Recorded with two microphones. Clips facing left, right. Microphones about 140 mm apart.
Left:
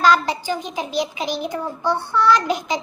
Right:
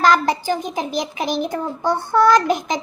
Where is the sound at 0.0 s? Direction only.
45° right (ahead or behind).